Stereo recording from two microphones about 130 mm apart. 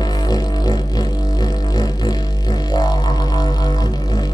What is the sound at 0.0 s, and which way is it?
Music, 30° left (ahead or behind).